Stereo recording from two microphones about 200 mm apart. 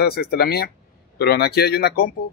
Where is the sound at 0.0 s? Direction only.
50° left (ahead or behind).